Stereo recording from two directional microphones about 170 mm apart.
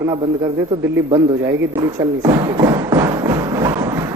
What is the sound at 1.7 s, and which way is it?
Thump, 20° right (ahead or behind).